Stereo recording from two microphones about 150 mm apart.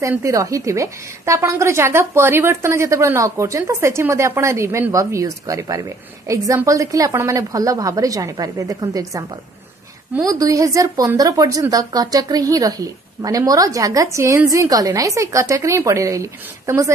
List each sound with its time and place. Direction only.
0.0 s a woman's voice: 20° right (ahead or behind)
10.2 s a woman's voice: 20° right (ahead or behind)